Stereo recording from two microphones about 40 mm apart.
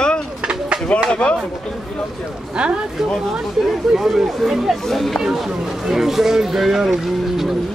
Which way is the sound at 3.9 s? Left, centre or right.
Centre.